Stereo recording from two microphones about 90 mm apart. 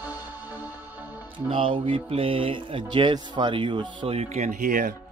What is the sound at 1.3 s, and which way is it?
Speech, 70° right (ahead or behind).